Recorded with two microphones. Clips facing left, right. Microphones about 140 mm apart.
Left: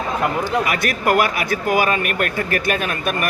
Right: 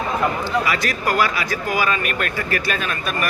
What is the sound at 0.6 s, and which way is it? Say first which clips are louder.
Speech: left 2 dB; 55° left (ahead or behind).